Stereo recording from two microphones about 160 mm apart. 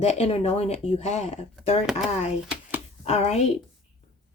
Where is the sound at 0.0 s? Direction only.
40° left (ahead or behind).